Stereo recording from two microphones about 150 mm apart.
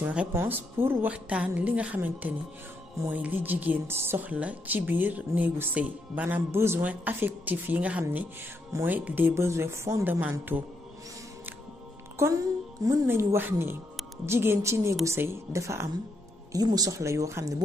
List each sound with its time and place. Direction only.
0.0 s speech: 10° right (ahead or behind)
12.8 s speech: 15° right (ahead or behind)